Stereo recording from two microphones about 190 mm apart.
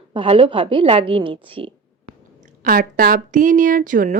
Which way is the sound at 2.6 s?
50° right (ahead or behind).